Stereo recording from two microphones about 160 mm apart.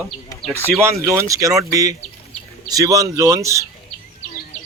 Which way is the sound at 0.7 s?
15° right (ahead or behind).